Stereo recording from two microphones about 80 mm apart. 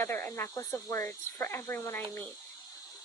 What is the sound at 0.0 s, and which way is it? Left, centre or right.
Speech, left.